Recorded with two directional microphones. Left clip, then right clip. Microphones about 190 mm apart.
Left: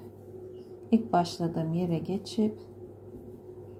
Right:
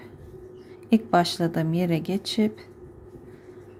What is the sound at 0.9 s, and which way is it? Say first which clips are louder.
A woman's voice: right 5 dB; 20° right (ahead or behind).